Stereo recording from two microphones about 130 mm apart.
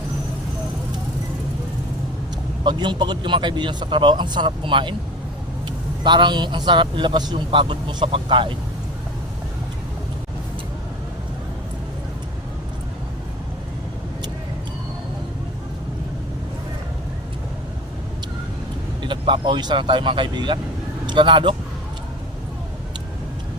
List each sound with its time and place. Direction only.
2.6 s speech: 35° right (ahead or behind)
6.0 s speech: 35° right (ahead or behind)
19.0 s speech: 40° right (ahead or behind)